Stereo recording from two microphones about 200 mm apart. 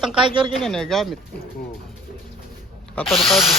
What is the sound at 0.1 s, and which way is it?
Speech, 25° right (ahead or behind).